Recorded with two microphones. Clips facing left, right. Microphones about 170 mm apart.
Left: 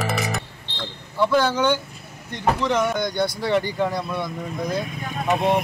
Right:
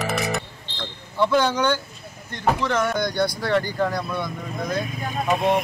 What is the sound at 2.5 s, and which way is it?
Speech, 5° right (ahead or behind).